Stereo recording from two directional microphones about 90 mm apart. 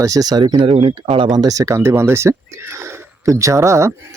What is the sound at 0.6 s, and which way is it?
Speech, 85° right.